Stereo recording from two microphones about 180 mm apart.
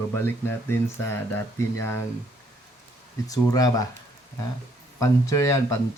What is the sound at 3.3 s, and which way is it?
Speech, 20° left (ahead or behind).